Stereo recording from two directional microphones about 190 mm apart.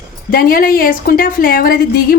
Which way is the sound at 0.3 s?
50° left (ahead or behind).